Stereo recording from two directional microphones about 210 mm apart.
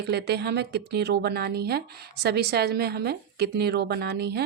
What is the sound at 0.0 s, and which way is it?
Speech, 50° right (ahead or behind).